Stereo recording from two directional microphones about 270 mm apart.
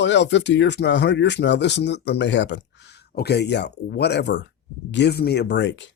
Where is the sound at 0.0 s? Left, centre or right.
Left.